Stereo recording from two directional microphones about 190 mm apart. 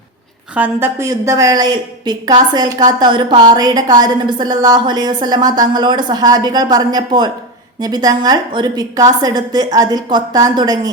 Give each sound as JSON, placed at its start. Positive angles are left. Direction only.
{"t": 0.5, "sound": "a woman's voice", "side_deg": -10}